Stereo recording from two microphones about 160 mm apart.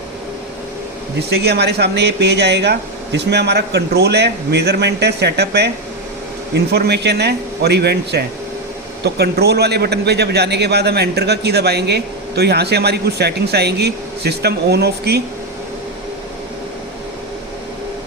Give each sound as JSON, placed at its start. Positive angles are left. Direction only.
{"t": 1.3, "sound": "a man's voice", "side_deg": -90}